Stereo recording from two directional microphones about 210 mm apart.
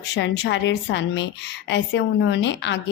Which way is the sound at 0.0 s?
60° left (ahead or behind).